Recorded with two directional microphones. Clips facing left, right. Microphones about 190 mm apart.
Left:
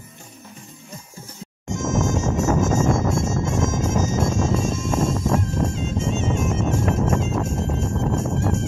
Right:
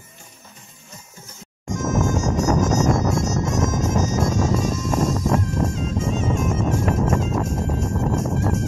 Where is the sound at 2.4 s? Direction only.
25° left (ahead or behind).